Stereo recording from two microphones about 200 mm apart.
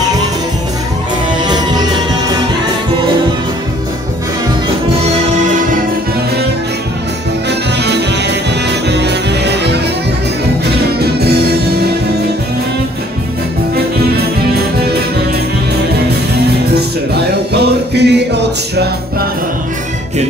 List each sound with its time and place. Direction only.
1.4 s music: 20° right (ahead or behind)
7.4 s music: 55° right (ahead or behind)
16.7 s music: 55° right (ahead or behind)